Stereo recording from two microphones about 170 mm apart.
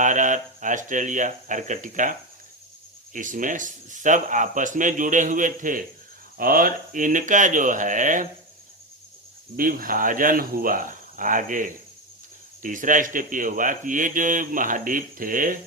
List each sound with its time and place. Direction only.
0.0 s speech: 50° right (ahead or behind)
9.6 s speech: 55° right (ahead or behind)